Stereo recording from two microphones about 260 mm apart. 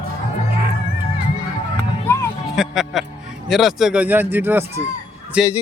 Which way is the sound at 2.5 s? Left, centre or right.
Centre.